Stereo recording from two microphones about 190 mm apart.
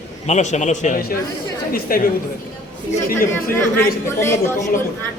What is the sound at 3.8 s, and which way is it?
Speech, 15° left (ahead or behind).